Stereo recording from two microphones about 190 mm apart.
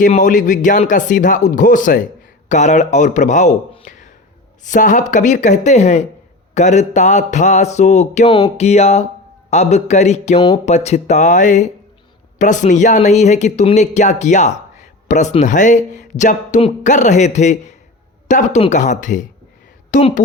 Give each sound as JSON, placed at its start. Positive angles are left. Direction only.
{"t": 0.0, "sound": "speech", "side_deg": 45}